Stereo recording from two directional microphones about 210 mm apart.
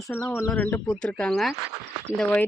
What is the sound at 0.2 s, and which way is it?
Speech, 5° left (ahead or behind).